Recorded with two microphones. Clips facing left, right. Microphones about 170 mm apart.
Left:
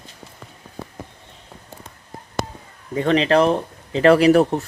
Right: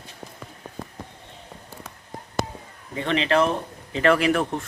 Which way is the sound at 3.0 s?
35° left (ahead or behind).